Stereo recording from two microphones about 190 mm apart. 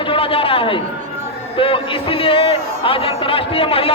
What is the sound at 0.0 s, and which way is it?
A man's voice, 30° left (ahead or behind).